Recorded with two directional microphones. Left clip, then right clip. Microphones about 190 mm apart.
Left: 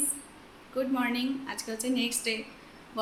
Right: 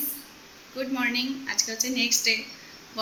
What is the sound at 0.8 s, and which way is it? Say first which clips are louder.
A woman's voice: right 2 dB; 5° left (ahead or behind).